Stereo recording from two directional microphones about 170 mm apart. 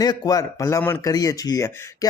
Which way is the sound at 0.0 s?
20° left (ahead or behind).